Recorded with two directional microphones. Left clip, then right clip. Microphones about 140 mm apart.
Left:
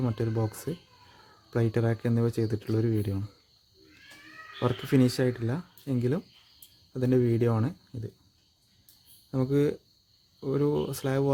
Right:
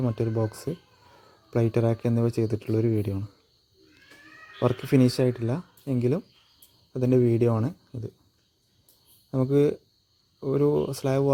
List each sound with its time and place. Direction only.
0.0 s speech: 15° right (ahead or behind)
4.6 s speech: 15° right (ahead or behind)
9.3 s speech: 20° right (ahead or behind)